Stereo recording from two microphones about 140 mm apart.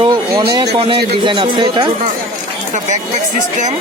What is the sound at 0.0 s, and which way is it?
Speech, 30° right (ahead or behind).